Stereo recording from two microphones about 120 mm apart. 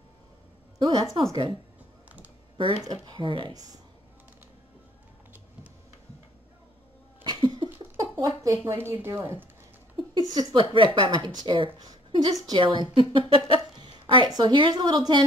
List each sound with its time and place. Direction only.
0.7 s a woman's voice: 35° right (ahead or behind)
7.2 s a sound: 40° right (ahead or behind)
8.0 s speech: 30° right (ahead or behind)
10.5 s a woman's voice: 45° right (ahead or behind)